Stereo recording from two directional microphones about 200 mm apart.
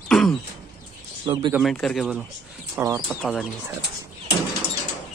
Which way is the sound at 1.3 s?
25° right (ahead or behind).